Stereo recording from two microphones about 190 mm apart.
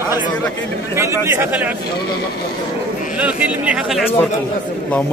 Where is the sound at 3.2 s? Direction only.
5° right (ahead or behind).